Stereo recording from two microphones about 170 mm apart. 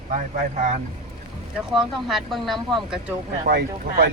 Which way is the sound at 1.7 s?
Centre (ahead or behind).